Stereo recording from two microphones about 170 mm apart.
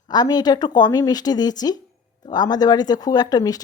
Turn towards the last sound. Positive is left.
turn(degrees=20)  # may be behind; listen again after turning